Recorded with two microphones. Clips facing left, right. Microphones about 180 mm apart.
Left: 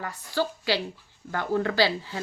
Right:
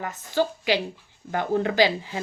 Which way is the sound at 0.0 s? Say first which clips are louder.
Right 3 dB; 20° right (ahead or behind).